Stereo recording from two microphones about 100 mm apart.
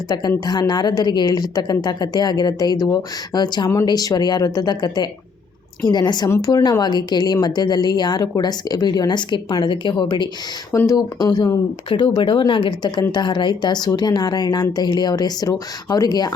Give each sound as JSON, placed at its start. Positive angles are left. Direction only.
{"t": 0.1, "sound": "a woman's voice", "side_deg": 40}
{"t": 11.9, "sound": "a woman's voice", "side_deg": 50}